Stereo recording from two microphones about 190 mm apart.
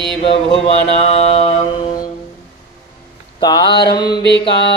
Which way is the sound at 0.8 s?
35° left (ahead or behind).